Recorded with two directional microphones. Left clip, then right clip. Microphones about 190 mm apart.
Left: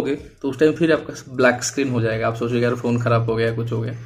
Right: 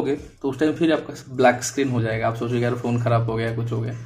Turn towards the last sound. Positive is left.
turn(degrees=25)  # may be behind; listen again after turning